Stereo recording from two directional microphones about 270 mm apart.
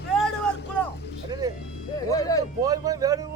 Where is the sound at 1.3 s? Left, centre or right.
Centre.